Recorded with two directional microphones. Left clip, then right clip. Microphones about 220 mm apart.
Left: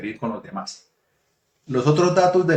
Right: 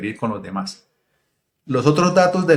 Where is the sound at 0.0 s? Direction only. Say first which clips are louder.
Right 4 dB; 45° right (ahead or behind).